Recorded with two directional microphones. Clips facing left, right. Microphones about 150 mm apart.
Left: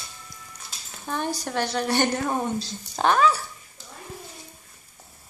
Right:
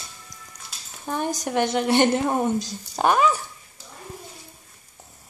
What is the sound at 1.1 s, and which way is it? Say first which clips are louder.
A woman's voice: right 3 dB; 15° right (ahead or behind).